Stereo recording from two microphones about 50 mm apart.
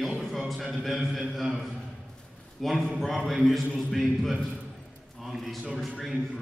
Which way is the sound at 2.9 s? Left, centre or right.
Centre.